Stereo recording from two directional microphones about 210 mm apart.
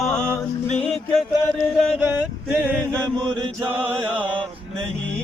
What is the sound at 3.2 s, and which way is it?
Chant, 25° right (ahead or behind).